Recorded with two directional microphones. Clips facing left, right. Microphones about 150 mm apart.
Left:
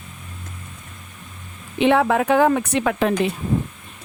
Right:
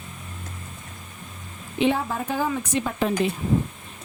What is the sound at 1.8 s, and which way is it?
Speech, 70° left (ahead or behind).